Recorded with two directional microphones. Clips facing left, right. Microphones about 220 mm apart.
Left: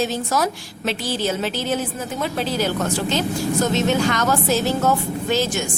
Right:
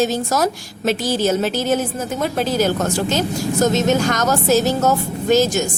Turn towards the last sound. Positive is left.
turn(degrees=-40)  # may be behind; listen again after turning